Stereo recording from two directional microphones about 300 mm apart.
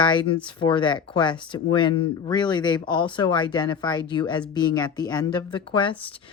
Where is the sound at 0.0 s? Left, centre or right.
Centre.